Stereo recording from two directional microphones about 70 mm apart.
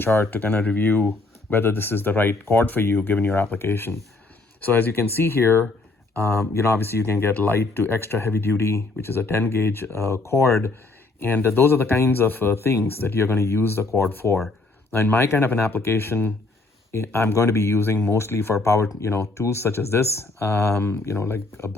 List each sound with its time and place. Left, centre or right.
0.0 s speech: left
6.5 s speech: left
11.2 s speech: left